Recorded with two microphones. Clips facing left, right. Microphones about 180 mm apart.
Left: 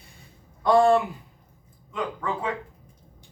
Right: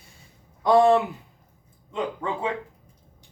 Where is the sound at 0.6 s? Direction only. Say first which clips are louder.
Right 1 dB; 20° right (ahead or behind).